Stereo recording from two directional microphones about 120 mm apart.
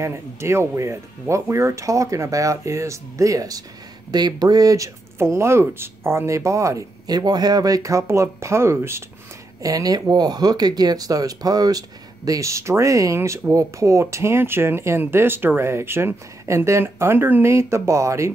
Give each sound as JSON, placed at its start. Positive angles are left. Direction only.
{"t": 0.0, "sound": "speech", "side_deg": -25}